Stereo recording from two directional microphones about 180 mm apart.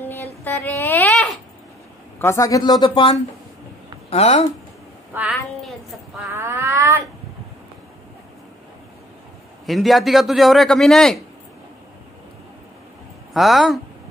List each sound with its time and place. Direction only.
0.0 s a sound: 10° left (ahead or behind)
2.1 s speech: 15° left (ahead or behind); by 4.5 s 35° left (ahead or behind)
5.1 s a man's voice: 5° right (ahead or behind)
6.3 s a sound: 15° right (ahead or behind)
9.7 s a man's voice: centre (ahead or behind)
13.3 s speech: centre (ahead or behind)